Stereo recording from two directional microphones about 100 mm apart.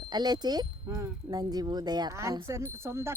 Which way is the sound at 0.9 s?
30° right (ahead or behind).